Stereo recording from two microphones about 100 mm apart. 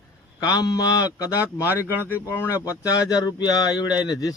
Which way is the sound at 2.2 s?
25° left (ahead or behind).